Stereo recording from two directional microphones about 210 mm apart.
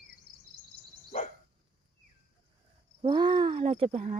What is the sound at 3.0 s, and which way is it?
Speech, 20° right (ahead or behind).